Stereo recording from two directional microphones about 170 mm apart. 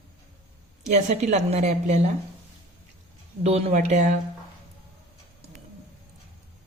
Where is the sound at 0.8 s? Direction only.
40° right (ahead or behind).